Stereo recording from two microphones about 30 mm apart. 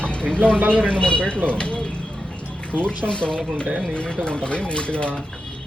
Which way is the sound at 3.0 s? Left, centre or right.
Left.